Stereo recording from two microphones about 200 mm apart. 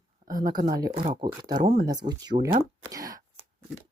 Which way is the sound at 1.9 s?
20° right (ahead or behind).